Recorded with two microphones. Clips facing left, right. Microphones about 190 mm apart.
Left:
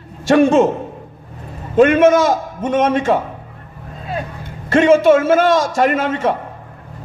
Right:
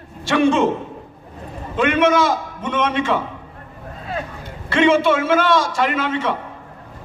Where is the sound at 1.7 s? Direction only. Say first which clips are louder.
Left 6 dB; 45° left (ahead or behind).